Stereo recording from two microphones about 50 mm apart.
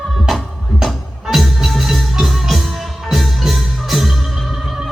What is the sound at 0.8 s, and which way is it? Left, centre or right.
Music, centre.